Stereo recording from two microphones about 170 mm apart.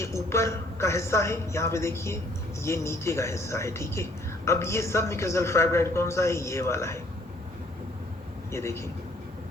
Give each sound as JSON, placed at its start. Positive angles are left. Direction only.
{"t": 0.0, "sound": "speech", "side_deg": 15}
{"t": 8.5, "sound": "speech", "side_deg": 15}